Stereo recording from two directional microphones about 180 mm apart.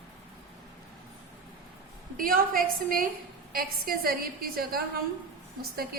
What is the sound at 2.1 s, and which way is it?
A woman's voice, 50° right (ahead or behind).